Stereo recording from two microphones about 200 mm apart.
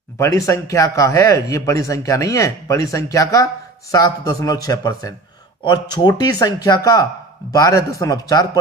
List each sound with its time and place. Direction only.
0.2 s speech: 15° left (ahead or behind)